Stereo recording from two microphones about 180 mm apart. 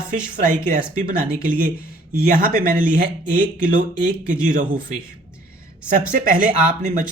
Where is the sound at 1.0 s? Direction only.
50° right (ahead or behind).